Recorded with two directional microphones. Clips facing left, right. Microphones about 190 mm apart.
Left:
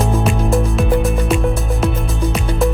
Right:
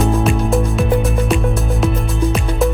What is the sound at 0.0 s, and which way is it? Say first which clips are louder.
Music: right 2 dB; centre (ahead or behind).